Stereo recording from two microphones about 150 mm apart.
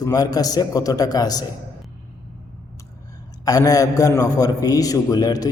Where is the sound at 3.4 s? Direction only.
25° left (ahead or behind).